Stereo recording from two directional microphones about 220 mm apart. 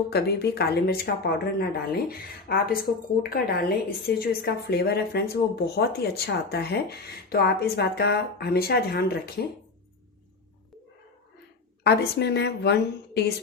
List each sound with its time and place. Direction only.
0.1 s speech: 45° left (ahead or behind)
11.8 s speech: 50° left (ahead or behind)